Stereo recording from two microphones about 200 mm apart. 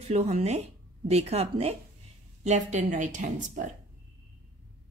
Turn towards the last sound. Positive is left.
turn(degrees=-40)  # may be behind; listen again after turning